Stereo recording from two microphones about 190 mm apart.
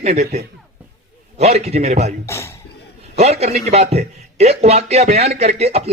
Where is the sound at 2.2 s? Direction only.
15° left (ahead or behind).